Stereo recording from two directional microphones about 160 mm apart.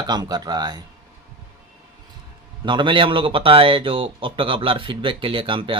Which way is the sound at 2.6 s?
30° right (ahead or behind).